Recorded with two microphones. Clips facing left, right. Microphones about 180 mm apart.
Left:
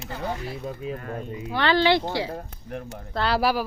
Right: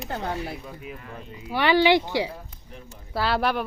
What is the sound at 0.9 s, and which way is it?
Speech, 50° left (ahead or behind).